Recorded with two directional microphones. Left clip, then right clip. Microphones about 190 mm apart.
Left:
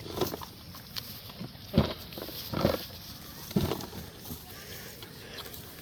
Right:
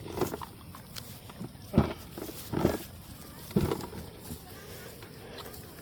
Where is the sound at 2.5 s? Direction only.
25° left (ahead or behind).